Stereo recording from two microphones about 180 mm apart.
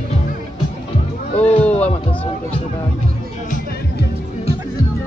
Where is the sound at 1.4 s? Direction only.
35° left (ahead or behind).